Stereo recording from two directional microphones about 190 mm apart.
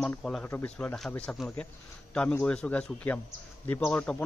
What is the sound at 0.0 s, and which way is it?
Speech, 5° left (ahead or behind).